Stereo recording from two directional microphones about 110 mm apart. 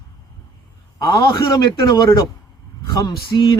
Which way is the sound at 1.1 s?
30° left (ahead or behind).